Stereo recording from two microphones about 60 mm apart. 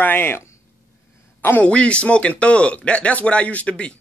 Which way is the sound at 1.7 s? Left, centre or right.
Centre.